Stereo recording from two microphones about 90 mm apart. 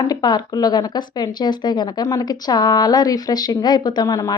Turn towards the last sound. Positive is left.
turn(degrees=40)  # may be behind; listen again after turning